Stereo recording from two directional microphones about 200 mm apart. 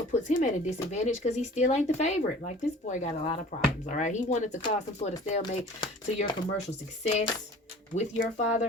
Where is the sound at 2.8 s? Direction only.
40° left (ahead or behind).